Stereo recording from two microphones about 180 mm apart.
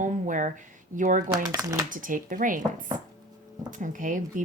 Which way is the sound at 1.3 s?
20° right (ahead or behind).